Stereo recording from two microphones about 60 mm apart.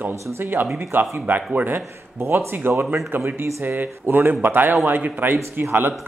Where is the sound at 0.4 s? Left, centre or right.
Right.